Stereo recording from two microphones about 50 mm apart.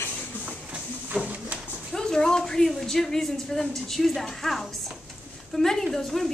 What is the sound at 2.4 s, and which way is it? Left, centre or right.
A woman's voice, centre.